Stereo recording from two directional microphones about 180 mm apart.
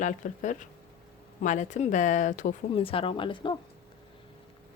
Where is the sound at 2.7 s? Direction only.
30° left (ahead or behind).